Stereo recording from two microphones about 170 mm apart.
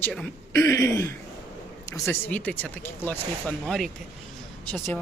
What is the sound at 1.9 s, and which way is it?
Speech, 15° left (ahead or behind).